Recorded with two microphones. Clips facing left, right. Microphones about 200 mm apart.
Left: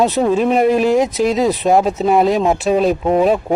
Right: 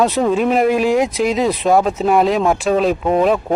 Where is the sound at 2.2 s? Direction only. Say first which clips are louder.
Left 1 dB; centre (ahead or behind).